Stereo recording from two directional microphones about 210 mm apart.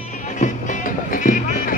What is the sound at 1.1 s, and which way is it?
Music, 40° left (ahead or behind).